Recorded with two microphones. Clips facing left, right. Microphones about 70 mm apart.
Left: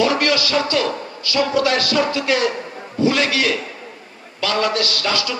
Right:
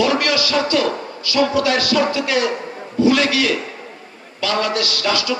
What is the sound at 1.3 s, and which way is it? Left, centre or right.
A man's voice, left.